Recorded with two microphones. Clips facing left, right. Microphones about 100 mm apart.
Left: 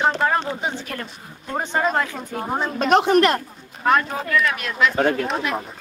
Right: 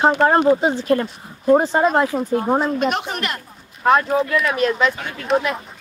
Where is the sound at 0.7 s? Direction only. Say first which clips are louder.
Right 10 dB; 35° right (ahead or behind).